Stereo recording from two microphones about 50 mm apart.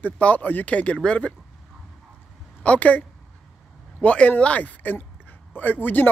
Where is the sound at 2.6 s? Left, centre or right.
Left.